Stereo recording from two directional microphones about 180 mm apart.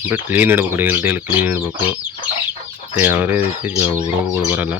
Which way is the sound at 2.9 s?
10° right (ahead or behind).